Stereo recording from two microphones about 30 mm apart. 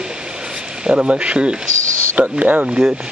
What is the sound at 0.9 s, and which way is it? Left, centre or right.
Speech, right.